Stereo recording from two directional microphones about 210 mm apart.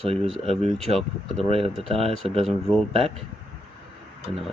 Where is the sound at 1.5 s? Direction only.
25° right (ahead or behind).